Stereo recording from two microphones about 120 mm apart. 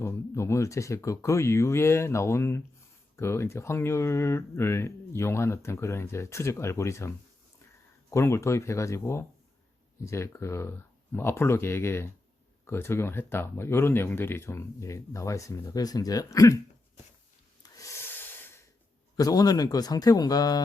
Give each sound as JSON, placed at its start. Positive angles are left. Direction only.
{"t": 0.0, "sound": "speech", "side_deg": 25}
{"t": 8.1, "sound": "speech", "side_deg": 25}
{"t": 17.6, "sound": "breathing", "side_deg": 25}
{"t": 19.1, "sound": "speech", "side_deg": 30}